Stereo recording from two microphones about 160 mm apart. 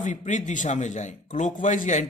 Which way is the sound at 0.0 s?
50° left (ahead or behind).